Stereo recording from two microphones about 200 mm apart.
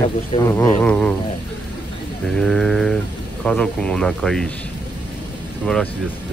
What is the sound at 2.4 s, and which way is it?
Speech, 5° left (ahead or behind).